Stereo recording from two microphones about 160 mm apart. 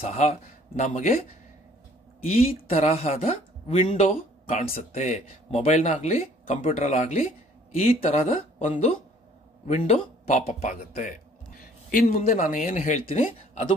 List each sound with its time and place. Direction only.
0.0 s speech: 40° left (ahead or behind)
2.3 s speech: 40° left (ahead or behind)
10.7 s speech: 55° left (ahead or behind)